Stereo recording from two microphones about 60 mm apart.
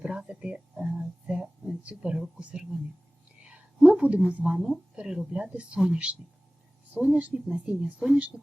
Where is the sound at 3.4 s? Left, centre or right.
Right.